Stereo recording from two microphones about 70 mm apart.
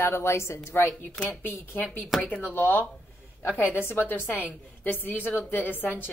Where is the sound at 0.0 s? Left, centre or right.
Left.